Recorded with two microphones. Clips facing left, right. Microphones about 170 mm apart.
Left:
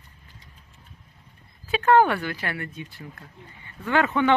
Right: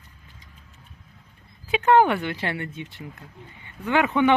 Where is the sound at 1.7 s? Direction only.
20° right (ahead or behind).